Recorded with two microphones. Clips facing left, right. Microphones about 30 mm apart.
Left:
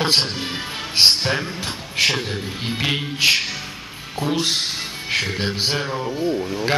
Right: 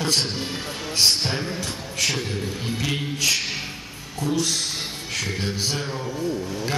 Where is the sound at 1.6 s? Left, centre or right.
Left.